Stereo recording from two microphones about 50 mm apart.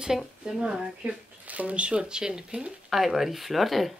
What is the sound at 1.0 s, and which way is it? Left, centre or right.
Speech, right.